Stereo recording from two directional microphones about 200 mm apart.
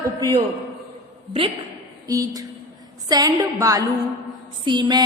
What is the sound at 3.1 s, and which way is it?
A woman's voice, 20° right (ahead or behind).